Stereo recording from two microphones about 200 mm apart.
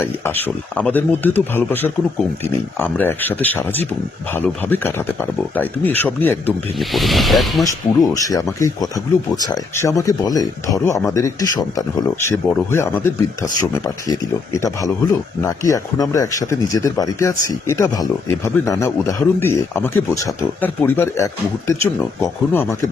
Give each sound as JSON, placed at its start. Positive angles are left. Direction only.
{"t": 0.0, "sound": "speech", "side_deg": 10}
{"t": 7.6, "sound": "speech", "side_deg": 15}